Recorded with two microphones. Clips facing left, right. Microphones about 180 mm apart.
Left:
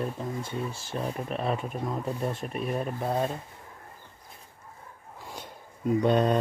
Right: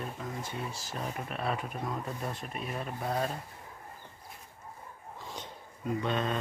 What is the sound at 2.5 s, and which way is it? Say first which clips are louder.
Speech: left 7 dB; 45° left (ahead or behind).